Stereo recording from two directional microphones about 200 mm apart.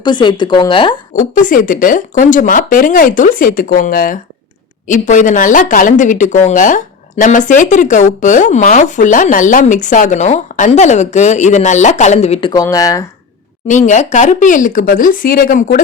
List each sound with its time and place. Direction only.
0.0 s speech: 25° left (ahead or behind)
1.1 s speech: 40° left (ahead or behind); by 13.1 s 15° left (ahead or behind)
13.7 s speech: 40° left (ahead or behind)